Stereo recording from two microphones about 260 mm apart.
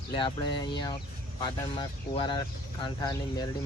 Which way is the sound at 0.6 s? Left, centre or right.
Centre.